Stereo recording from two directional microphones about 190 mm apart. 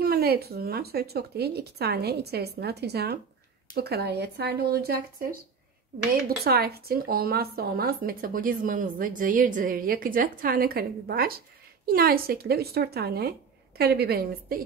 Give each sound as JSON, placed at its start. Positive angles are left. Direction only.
{"t": 0.0, "sound": "speech", "side_deg": -55}